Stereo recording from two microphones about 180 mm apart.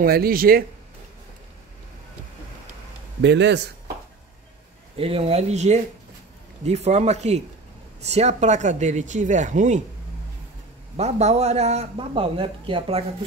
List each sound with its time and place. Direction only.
0.0 s speech: 55° right (ahead or behind)
3.2 s a man's voice: 75° right (ahead or behind)
4.9 s a man's voice: 30° right (ahead or behind)
11.0 s a man's voice: 40° right (ahead or behind)